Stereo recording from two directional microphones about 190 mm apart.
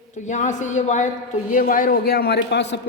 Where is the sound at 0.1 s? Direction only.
40° left (ahead or behind).